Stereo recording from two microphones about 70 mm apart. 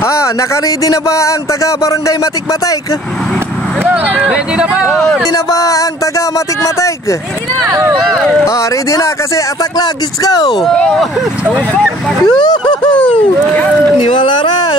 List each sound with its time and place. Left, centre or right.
0.0 s speech: left
3.9 s speech: centre
4.9 s speech: centre
5.3 s speech: left
7.6 s speech: right
8.0 s speech: centre
9.8 s speech: left
10.6 s speech: centre
12.3 s speech: left